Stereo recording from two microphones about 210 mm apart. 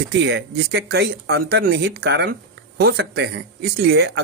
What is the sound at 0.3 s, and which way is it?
Speech, 55° right (ahead or behind).